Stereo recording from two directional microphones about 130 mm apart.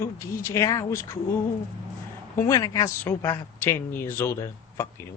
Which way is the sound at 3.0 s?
15° left (ahead or behind).